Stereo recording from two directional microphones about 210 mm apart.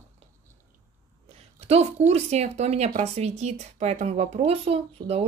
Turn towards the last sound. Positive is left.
turn(degrees=-30)  # may be behind; listen again after turning